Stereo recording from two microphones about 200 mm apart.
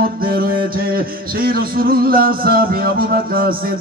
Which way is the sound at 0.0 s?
45° right (ahead or behind).